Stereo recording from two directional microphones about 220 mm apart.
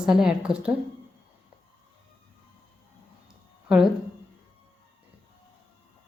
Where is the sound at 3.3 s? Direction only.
5° right (ahead or behind).